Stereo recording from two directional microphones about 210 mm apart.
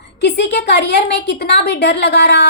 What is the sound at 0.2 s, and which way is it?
A woman's voice, 50° left (ahead or behind).